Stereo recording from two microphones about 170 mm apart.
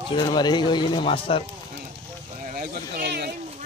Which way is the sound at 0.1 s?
25° left (ahead or behind).